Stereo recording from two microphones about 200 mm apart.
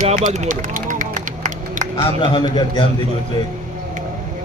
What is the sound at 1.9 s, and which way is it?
Speech, 25° left (ahead or behind).